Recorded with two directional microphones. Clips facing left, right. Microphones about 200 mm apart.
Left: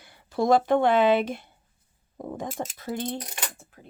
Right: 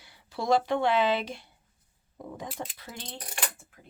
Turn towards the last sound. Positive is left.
turn(degrees=50)  # may be behind; listen again after turning